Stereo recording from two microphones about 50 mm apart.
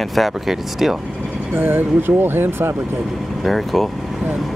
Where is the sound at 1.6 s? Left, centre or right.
Right.